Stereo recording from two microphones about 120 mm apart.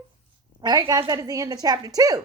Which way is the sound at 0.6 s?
35° right (ahead or behind).